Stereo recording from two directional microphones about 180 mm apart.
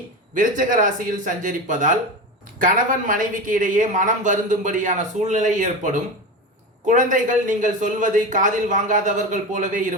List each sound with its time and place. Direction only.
0.3 s speech: 50° right (ahead or behind)